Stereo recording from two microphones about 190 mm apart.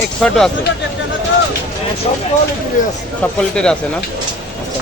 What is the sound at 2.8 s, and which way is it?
Speech, 40° left (ahead or behind).